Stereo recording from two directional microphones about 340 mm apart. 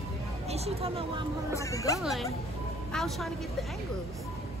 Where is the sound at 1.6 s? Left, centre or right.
Centre.